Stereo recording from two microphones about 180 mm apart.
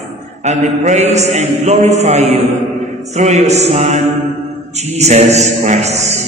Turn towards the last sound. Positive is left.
turn(degrees=-40)  # may be behind; listen again after turning